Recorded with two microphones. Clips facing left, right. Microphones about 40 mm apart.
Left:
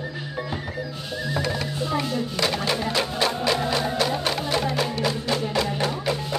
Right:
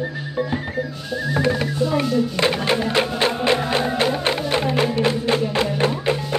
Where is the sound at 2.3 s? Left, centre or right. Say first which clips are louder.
Right 5 dB; right.